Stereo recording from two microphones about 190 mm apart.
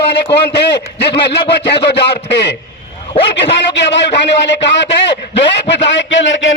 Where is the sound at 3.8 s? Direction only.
65° left (ahead or behind).